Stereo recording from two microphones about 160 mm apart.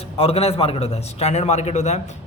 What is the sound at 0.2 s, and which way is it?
A man's voice, 40° left (ahead or behind).